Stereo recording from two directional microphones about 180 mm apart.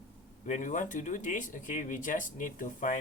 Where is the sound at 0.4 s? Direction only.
45° left (ahead or behind).